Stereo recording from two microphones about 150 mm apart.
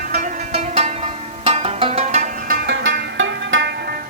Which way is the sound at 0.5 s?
45° right (ahead or behind).